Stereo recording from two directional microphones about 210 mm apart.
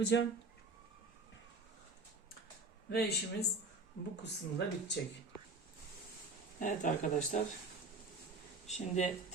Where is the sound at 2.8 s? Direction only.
50° left (ahead or behind).